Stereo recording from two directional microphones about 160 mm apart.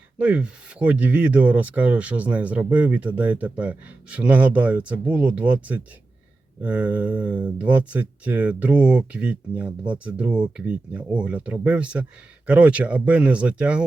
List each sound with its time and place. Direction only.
0.2 s speech: 5° right (ahead or behind)